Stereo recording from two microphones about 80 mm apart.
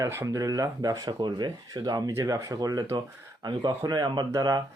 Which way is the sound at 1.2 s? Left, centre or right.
Right.